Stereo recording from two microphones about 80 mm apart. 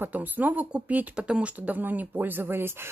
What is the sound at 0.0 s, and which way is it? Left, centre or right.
Speech, right.